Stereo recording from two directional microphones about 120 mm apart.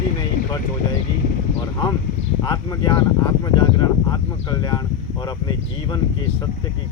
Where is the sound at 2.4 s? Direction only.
35° left (ahead or behind).